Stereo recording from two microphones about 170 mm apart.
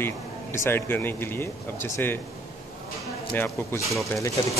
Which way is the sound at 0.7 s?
15° left (ahead or behind).